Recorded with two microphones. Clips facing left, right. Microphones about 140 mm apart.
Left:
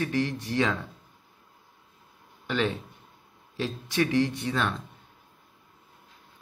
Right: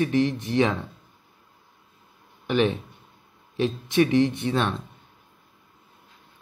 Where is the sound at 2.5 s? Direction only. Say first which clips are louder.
Right 5 dB; 20° right (ahead or behind).